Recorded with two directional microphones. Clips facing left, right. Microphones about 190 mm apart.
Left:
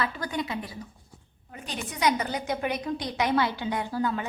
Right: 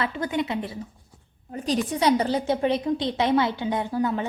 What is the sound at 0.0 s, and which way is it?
A woman's voice, 25° right (ahead or behind).